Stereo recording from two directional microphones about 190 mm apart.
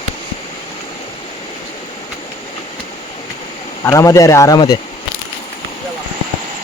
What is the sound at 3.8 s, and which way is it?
Speech, 15° left (ahead or behind).